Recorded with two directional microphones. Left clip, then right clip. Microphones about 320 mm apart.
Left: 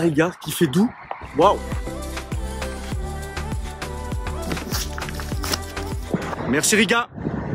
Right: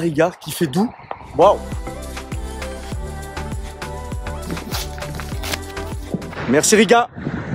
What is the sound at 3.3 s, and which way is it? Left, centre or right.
Music, centre.